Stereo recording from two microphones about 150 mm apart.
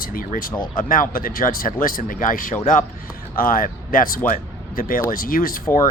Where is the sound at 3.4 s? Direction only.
70° left (ahead or behind).